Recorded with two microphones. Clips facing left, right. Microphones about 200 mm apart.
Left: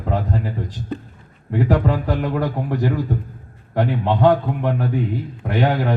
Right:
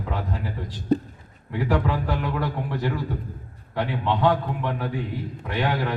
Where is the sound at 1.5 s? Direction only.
45° left (ahead or behind).